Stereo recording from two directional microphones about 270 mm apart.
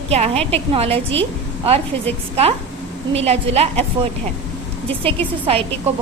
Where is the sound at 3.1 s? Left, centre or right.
Right.